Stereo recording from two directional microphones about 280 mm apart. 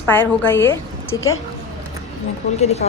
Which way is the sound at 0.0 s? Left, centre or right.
Centre.